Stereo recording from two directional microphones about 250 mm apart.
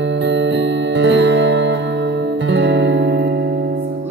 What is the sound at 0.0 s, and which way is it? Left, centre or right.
Music, right.